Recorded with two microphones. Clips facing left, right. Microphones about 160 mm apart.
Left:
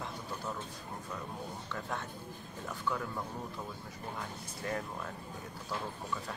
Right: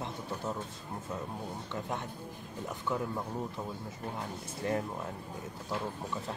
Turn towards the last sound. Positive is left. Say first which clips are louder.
# right 5 dB
turn(degrees=-25)  # may be behind; listen again after turning